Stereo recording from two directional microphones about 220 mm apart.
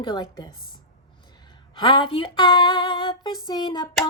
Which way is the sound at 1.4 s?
20° left (ahead or behind).